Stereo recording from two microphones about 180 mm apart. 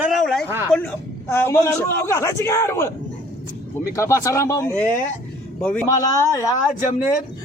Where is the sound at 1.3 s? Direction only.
15° left (ahead or behind).